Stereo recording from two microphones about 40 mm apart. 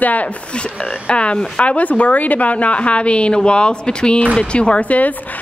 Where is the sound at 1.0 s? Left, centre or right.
Left.